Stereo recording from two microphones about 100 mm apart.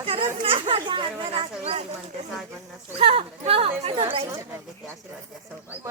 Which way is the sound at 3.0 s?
80° right.